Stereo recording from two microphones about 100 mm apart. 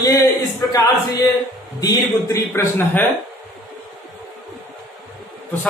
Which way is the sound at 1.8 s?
40° left (ahead or behind).